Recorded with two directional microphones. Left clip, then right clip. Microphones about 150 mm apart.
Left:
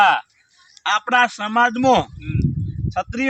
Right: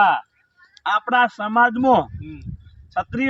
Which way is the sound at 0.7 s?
15° left (ahead or behind).